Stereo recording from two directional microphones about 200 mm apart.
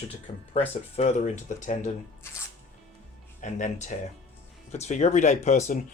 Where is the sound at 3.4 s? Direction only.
35° left (ahead or behind).